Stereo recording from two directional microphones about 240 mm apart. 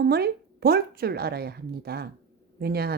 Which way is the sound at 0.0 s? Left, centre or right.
Right.